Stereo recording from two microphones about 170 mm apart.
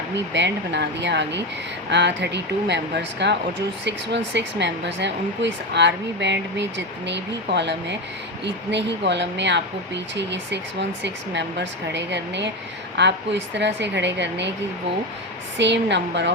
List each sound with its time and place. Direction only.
0.3 s a woman's voice: 90° right
15.5 s a woman's voice: 90° right